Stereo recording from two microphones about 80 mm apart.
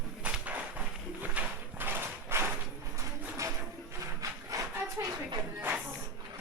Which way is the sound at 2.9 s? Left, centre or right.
Right.